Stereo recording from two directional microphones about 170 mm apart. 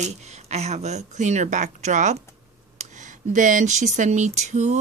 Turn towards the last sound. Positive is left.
turn(degrees=-40)  # may be behind; listen again after turning